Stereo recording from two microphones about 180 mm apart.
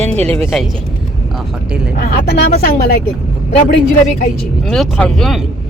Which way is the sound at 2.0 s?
65° left (ahead or behind).